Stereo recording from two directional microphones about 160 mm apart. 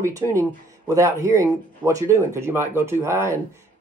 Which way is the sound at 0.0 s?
20° right (ahead or behind).